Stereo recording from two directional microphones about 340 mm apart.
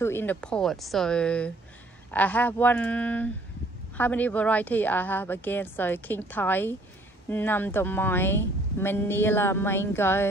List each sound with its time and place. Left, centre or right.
0.0 s a woman's voice: centre